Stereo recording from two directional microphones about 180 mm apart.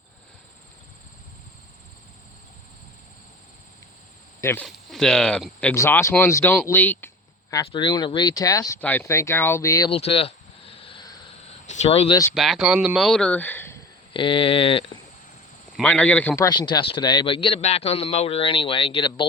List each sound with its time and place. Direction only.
4.4 s a sound: 15° left (ahead or behind)
4.6 s speech: 5° left (ahead or behind)
7.5 s a man's voice: 25° left (ahead or behind)
9.9 s cricket: 30° left (ahead or behind)
10.8 s vehicle: 30° left (ahead or behind)
11.6 s speech: 40° left (ahead or behind)
12.3 s speech: centre (ahead or behind)
14.1 s a man's voice: 30° left (ahead or behind)
15.8 s a man's voice: 10° left (ahead or behind); by 19.2 s 25° left (ahead or behind)